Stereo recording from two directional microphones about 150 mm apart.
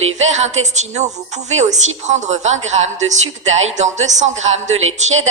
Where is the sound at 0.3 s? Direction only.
50° right (ahead or behind).